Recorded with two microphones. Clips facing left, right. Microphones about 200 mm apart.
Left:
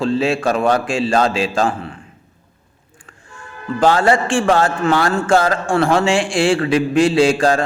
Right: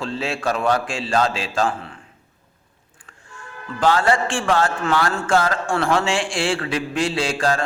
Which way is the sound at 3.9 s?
15° left (ahead or behind).